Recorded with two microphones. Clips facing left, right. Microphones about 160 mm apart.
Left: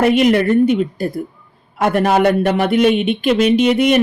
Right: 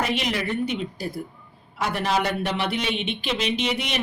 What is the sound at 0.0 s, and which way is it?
A woman's voice, 55° left (ahead or behind).